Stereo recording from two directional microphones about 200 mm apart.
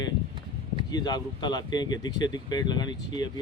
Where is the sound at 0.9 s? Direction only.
20° left (ahead or behind).